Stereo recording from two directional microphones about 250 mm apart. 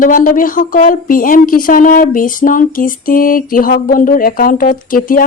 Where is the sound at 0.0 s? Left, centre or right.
Left.